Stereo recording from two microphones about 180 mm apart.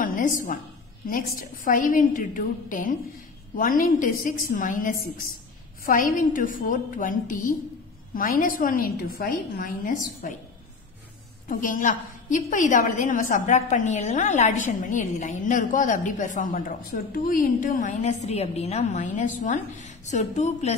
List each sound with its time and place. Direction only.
0.0 s a woman's voice: 50° left (ahead or behind)
1.6 s a woman's voice: 50° left (ahead or behind)
6.1 s a woman's voice: 50° left (ahead or behind)
11.4 s a woman's voice: 45° left (ahead or behind)